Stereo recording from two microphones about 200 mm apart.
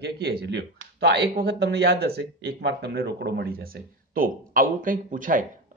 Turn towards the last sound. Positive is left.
turn(degrees=-40)  # may be behind; listen again after turning